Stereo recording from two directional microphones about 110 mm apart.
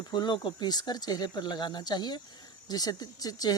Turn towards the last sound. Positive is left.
turn(degrees=35)  # may be behind; listen again after turning